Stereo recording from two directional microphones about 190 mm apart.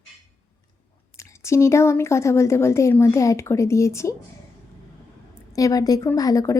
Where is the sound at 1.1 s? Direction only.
15° left (ahead or behind).